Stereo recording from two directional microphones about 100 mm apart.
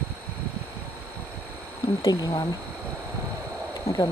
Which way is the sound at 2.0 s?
40° left (ahead or behind).